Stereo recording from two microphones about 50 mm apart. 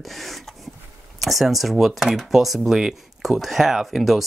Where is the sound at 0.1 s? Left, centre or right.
Centre.